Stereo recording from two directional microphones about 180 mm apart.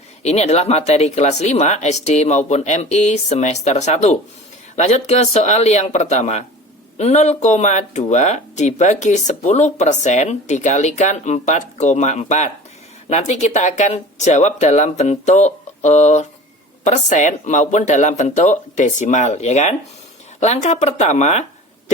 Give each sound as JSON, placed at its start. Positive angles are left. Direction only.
{"t": 0.2, "sound": "speech", "side_deg": 40}